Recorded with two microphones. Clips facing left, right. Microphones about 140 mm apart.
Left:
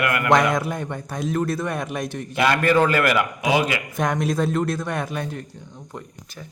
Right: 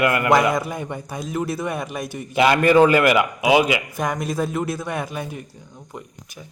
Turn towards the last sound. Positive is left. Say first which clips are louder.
# left 1 dB
turn(degrees=-10)  # may be behind; listen again after turning